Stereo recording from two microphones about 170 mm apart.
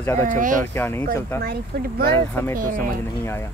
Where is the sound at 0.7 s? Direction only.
10° left (ahead or behind).